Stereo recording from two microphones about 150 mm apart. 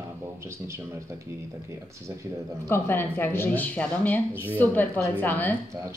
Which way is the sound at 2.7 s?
15° left (ahead or behind).